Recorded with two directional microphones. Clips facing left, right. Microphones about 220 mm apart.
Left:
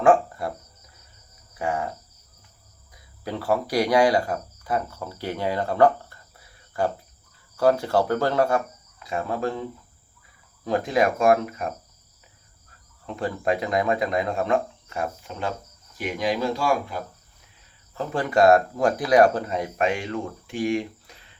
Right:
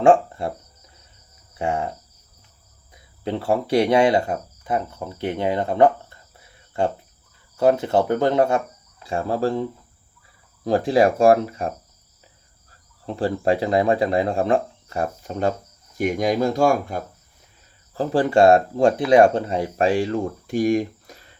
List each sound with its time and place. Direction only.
0.0 s speech: 25° right (ahead or behind)
1.5 s cricket: 25° right (ahead or behind)
2.9 s speech: 25° right (ahead or behind)
7.5 s cricket: 20° right (ahead or behind)
10.6 s speech: 30° right (ahead or behind)
13.1 s speech: 30° right (ahead or behind)
17.9 s speech: 35° right (ahead or behind)